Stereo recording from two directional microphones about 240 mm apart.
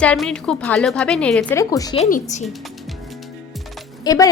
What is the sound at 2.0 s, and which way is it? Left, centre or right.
Speech, left.